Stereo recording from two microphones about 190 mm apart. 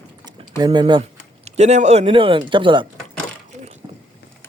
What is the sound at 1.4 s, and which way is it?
Speech, 35° right (ahead or behind).